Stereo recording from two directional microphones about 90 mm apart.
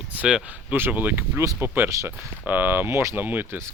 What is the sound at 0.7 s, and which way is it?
Speech, 20° right (ahead or behind).